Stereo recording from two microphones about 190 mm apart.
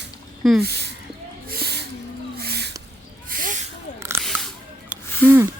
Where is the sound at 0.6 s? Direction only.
60° right (ahead or behind).